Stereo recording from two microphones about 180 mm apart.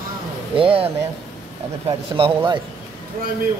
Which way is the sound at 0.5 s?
30° right (ahead or behind).